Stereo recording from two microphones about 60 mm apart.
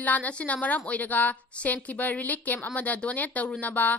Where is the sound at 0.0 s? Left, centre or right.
Left.